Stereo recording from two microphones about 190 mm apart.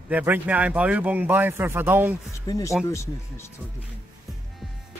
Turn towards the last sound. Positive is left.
turn(degrees=15)  # may be behind; listen again after turning